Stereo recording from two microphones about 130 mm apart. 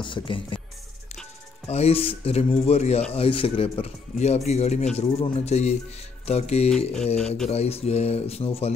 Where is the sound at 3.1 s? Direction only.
45° left (ahead or behind).